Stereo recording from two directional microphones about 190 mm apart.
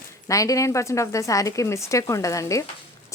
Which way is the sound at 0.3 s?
15° left (ahead or behind).